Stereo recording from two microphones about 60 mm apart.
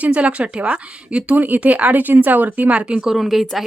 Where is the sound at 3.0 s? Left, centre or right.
Centre.